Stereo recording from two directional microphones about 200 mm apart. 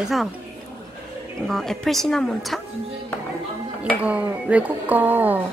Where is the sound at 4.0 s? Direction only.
5° right (ahead or behind).